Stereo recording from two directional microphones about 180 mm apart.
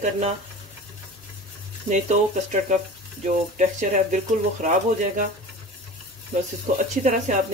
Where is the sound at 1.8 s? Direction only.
45° right (ahead or behind).